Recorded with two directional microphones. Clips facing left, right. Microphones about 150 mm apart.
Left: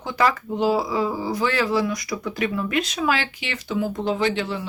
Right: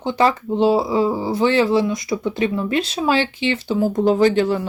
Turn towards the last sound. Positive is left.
turn(degrees=-45)  # may be behind; listen again after turning